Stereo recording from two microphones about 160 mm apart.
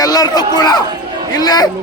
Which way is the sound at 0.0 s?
25° left (ahead or behind).